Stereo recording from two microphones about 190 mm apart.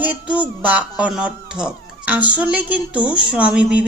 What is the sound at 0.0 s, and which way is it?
Speech, 10° right (ahead or behind).